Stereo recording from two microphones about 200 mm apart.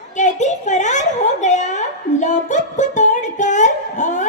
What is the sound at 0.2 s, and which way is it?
Speech, 35° left (ahead or behind).